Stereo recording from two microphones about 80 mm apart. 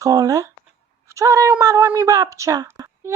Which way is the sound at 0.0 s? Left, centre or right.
Right.